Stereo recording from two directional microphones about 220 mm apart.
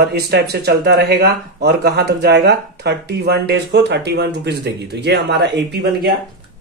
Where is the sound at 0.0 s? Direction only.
45° right (ahead or behind).